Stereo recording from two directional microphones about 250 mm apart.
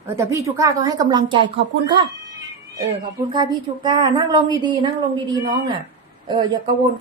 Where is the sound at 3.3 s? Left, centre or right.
Centre.